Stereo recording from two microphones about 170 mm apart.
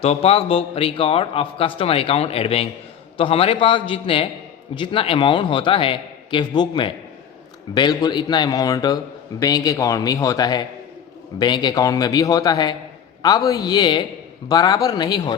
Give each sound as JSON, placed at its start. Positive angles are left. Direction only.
{"t": 0.0, "sound": "a man's voice", "side_deg": 35}